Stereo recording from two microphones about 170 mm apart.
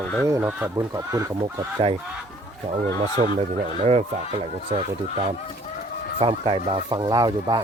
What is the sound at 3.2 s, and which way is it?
Speech, 40° right (ahead or behind).